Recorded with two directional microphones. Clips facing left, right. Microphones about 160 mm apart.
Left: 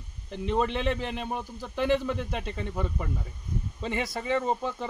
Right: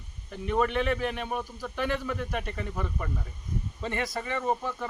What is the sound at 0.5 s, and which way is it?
Speech, 25° left (ahead or behind).